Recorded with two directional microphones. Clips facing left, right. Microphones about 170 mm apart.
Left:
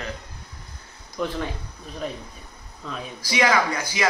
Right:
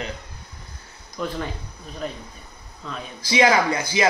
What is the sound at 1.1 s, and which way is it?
Speech, centre (ahead or behind).